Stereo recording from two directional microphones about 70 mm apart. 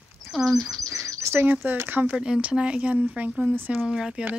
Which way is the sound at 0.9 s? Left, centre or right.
Right.